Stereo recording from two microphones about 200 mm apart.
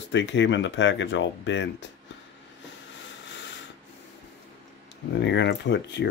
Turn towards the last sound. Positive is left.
turn(degrees=60)  # may be behind; listen again after turning